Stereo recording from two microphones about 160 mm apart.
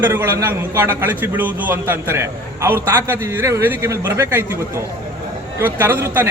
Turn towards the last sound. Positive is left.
turn(degrees=-15)  # may be behind; listen again after turning